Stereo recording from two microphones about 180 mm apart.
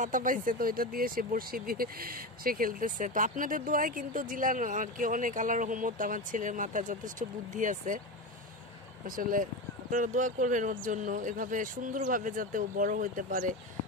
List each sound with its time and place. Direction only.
0.0 s speech: 50° right (ahead or behind)
9.0 s speech: 50° right (ahead or behind)